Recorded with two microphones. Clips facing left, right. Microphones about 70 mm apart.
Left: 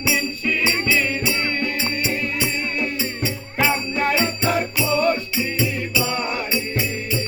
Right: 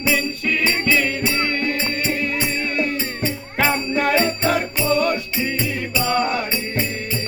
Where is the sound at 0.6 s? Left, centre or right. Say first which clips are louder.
Right 2 dB; right.